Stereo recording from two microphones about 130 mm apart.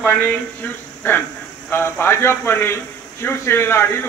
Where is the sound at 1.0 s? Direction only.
15° left (ahead or behind).